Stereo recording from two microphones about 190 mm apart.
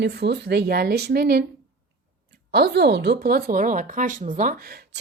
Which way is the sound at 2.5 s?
55° right (ahead or behind).